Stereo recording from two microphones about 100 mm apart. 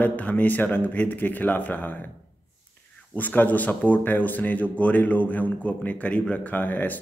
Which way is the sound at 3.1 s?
15° left (ahead or behind).